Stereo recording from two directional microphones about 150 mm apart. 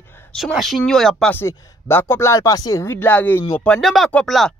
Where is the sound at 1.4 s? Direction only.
25° left (ahead or behind); by 4.6 s 5° left (ahead or behind).